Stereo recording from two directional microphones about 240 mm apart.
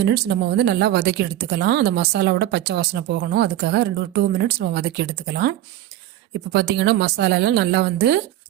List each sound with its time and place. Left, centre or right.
0.0 s speech: right